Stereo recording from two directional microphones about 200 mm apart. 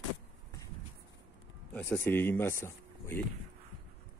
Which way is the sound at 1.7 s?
5° left (ahead or behind).